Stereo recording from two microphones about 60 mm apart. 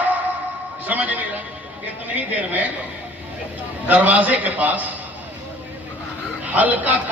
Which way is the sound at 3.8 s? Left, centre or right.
Right.